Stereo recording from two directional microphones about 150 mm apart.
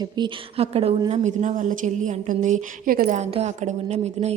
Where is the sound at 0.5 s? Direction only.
40° right (ahead or behind); by 3.2 s 70° right (ahead or behind).